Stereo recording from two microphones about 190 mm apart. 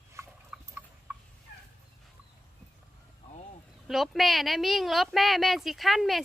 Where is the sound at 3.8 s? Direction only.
Centre (ahead or behind).